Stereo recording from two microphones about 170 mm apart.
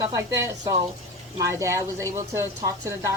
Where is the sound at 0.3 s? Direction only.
20° right (ahead or behind).